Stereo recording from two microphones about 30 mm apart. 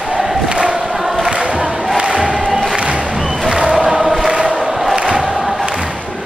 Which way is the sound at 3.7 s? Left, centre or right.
Centre.